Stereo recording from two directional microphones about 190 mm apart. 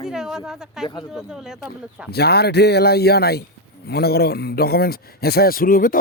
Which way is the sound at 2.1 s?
55° left (ahead or behind).